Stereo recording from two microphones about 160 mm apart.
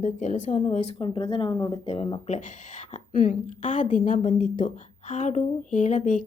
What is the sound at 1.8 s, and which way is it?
Speech, 35° left (ahead or behind).